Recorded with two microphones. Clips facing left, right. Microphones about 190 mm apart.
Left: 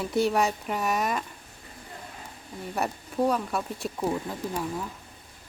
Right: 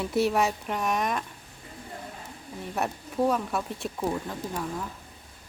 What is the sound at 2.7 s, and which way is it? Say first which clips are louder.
A woman's voice: even; centre (ahead or behind).